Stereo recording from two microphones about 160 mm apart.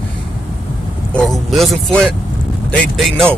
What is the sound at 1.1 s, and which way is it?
Speech, centre (ahead or behind).